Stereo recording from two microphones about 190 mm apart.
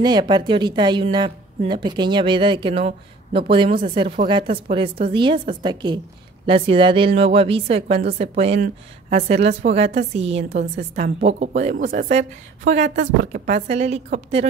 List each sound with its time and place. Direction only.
0.0 s a woman's voice: 20° right (ahead or behind)